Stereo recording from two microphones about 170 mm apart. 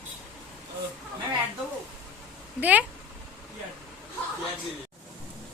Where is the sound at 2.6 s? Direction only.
10° right (ahead or behind).